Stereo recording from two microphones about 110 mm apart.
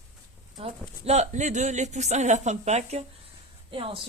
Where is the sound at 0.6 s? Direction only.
65° right (ahead or behind); by 3.0 s 80° right.